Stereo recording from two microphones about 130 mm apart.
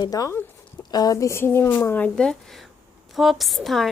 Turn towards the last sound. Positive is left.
turn(degrees=0)  # may be behind; listen again after turning